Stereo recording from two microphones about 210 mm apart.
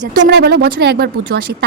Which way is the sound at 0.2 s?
50° right (ahead or behind).